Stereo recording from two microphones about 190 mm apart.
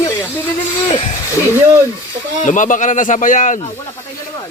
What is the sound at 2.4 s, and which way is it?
A man's voice, 40° left (ahead or behind).